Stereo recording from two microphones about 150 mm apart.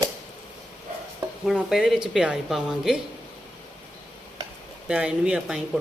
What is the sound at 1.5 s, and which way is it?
Speech, 5° right (ahead or behind).